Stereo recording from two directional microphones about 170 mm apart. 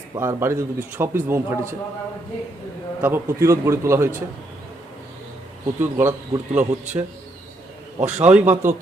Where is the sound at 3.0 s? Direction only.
15° right (ahead or behind).